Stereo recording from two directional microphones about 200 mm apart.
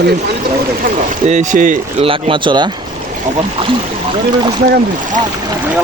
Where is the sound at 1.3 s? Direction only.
40° right (ahead or behind).